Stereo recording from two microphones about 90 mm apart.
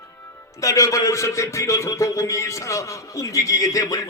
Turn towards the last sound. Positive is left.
turn(degrees=40)  # may be behind; listen again after turning